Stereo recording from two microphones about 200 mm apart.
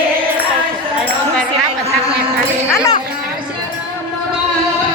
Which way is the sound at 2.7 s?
15° left (ahead or behind).